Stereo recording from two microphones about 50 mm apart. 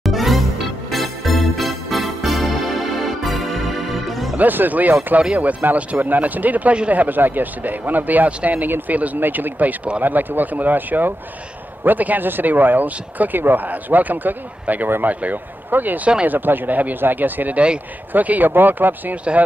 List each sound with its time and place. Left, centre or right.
0.0 s music: centre
4.4 s speech: right